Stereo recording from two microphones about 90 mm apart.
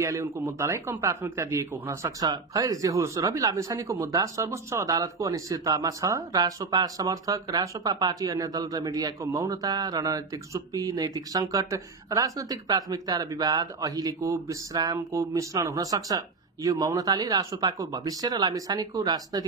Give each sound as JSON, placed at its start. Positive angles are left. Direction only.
{"t": 0.0, "sound": "a man's voice", "side_deg": -30}